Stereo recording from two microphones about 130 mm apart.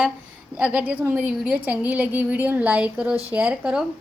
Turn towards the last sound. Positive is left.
turn(degrees=-5)  # may be behind; listen again after turning